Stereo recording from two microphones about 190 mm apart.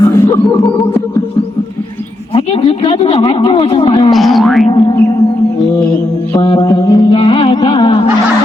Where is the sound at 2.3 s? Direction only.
30° left (ahead or behind).